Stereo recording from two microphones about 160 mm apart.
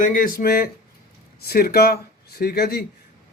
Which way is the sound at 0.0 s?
60° left (ahead or behind).